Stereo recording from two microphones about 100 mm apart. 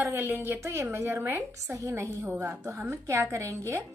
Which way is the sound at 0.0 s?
20° right (ahead or behind).